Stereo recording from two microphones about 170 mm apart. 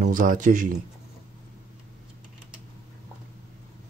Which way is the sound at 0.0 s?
50° right (ahead or behind).